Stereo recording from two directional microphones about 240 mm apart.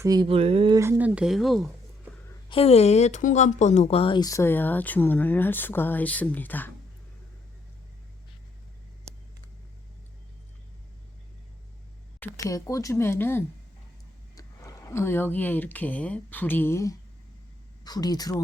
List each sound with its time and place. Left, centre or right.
0.0 s speech: centre
0.8 s speech: centre
2.5 s speech: left; by 6.7 s centre
12.2 s speech: centre